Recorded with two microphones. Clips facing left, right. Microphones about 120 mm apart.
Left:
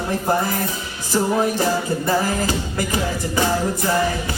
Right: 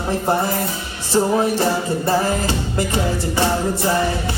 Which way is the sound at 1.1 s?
30° right (ahead or behind).